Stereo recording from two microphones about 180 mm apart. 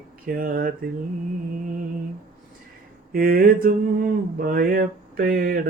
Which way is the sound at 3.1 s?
55° right (ahead or behind).